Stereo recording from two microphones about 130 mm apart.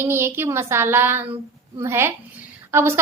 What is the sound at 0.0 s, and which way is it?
A woman's voice, 20° right (ahead or behind).